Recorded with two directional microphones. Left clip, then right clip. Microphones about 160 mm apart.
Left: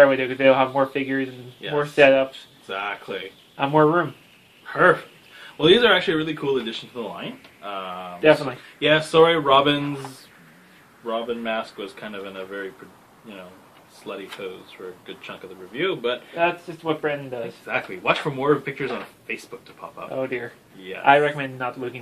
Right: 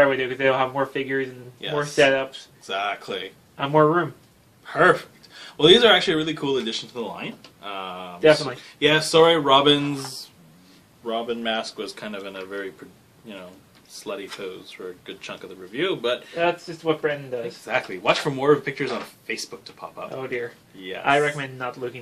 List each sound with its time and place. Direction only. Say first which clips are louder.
0.0 s speech: left 3 dB; 30° left (ahead or behind)
2.7 s speech: right 2 dB; 45° right (ahead or behind)
3.5 s speech: even; 30° left (ahead or behind)
4.6 s speech: even; 45° right (ahead or behind)
8.2 s speech: even; 30° left (ahead or behind)
8.7 s speech: even; 40° right (ahead or behind)
11.1 s speech: even; 50° right (ahead or behind)
14.0 s speech: right 1 dB; 60° right (ahead or behind)
16.3 s speech: left 1 dB; 30° left (ahead or behind)
17.6 s speech: right 1 dB; 50° right (ahead or behind)
20.2 s speech: left 3 dB; 30° left (ahead or behind)